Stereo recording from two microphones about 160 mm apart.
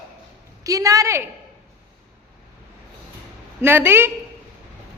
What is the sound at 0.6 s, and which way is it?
Speech, 20° right (ahead or behind).